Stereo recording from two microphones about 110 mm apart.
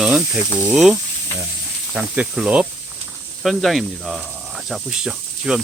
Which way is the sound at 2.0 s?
10° right (ahead or behind).